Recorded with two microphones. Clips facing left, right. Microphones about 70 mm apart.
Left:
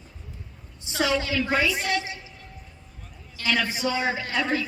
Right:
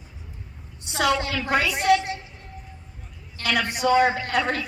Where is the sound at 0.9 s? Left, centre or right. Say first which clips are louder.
Right 2 dB; right.